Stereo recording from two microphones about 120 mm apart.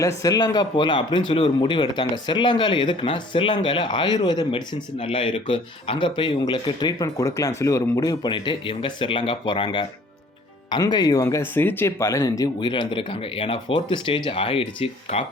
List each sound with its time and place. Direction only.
0.2 s speech: 30° left (ahead or behind); by 15.2 s 50° left (ahead or behind)